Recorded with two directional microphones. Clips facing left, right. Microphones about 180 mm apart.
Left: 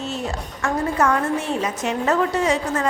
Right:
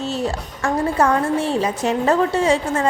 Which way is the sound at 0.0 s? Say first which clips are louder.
Right 4 dB; 35° right (ahead or behind).